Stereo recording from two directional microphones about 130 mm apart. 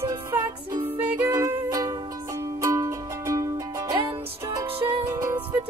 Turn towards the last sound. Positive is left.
turn(degrees=-25)  # may be behind; listen again after turning